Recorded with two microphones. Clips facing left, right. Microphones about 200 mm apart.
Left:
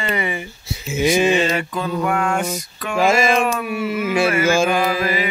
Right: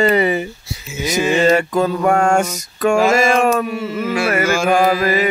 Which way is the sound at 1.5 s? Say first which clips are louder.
Right 7 dB; 45° right (ahead or behind).